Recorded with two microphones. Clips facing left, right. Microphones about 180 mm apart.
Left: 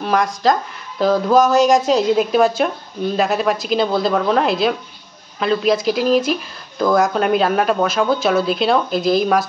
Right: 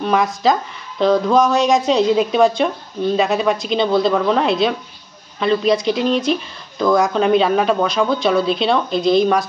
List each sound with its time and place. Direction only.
0.0 s speech: centre (ahead or behind)